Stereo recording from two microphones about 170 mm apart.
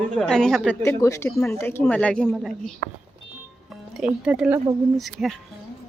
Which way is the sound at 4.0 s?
5° right (ahead or behind).